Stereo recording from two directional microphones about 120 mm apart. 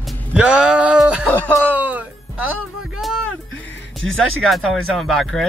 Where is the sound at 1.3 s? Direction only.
10° left (ahead or behind).